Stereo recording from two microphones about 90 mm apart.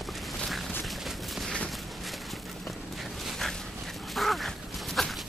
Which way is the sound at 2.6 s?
Centre (ahead or behind).